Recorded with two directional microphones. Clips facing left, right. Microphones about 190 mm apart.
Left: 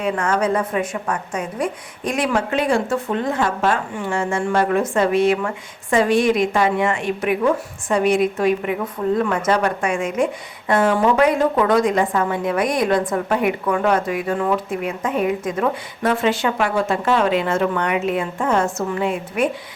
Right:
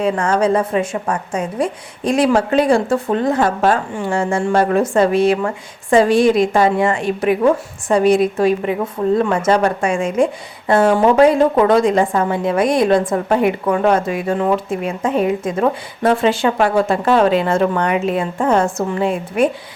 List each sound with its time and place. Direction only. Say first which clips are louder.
0.0 s a woman's voice: right 4 dB; 30° right (ahead or behind)